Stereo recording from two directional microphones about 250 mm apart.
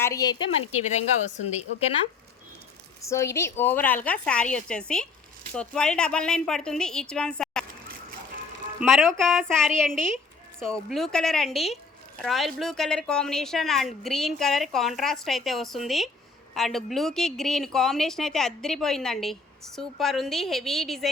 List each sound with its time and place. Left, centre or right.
0.0 s a woman's voice: centre
0.8 s a woman's voice: left
3.0 s a woman's voice: centre
8.8 s speech: centre